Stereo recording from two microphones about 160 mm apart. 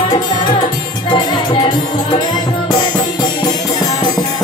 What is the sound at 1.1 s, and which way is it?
Music, 30° left (ahead or behind).